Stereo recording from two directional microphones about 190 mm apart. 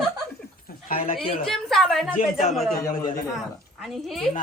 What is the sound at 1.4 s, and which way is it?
Speech, centre (ahead or behind).